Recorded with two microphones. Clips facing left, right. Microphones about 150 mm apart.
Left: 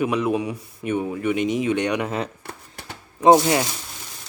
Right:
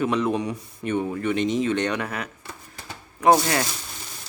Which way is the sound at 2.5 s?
65° left (ahead or behind).